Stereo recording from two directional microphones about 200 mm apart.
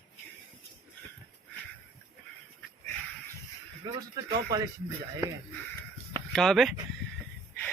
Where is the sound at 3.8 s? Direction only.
20° right (ahead or behind).